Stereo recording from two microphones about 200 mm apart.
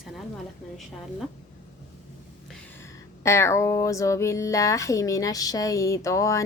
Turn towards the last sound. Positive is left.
turn(degrees=15)  # may be behind; listen again after turning